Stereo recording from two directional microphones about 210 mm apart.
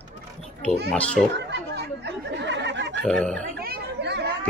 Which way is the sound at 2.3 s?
55° right (ahead or behind).